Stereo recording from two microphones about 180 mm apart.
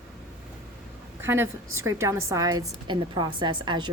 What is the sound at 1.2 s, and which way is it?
A woman's voice, 15° right (ahead or behind).